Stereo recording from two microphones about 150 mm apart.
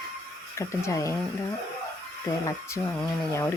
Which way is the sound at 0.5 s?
20° left (ahead or behind).